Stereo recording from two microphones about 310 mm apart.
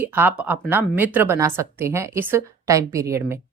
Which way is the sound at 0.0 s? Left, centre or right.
Centre.